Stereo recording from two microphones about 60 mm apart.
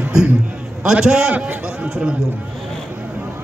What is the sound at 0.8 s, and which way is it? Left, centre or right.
Speech, centre.